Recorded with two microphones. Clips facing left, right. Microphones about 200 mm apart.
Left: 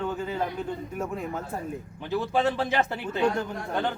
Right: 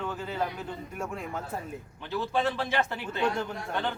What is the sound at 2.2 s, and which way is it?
Speech, 20° left (ahead or behind).